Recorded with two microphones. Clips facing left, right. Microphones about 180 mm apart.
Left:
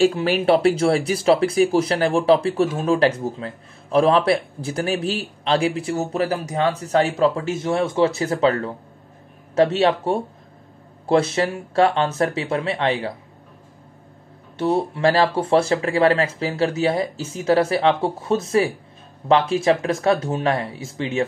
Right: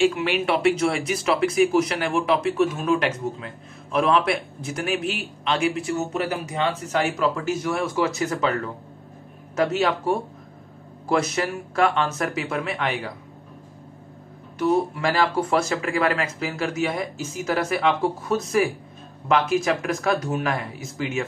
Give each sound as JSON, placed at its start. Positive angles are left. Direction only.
{"t": 0.0, "sound": "speech", "side_deg": 35}
{"t": 14.6, "sound": "speech", "side_deg": 30}